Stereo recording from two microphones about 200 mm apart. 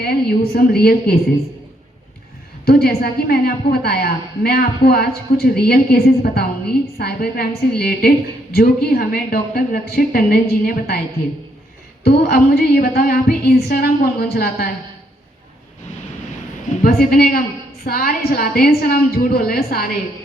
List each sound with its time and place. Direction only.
0.0 s a woman's voice: 50° left (ahead or behind)
2.6 s a woman's voice: 50° left (ahead or behind)
12.0 s a woman's voice: 50° left (ahead or behind)
16.8 s a woman's voice: 50° left (ahead or behind)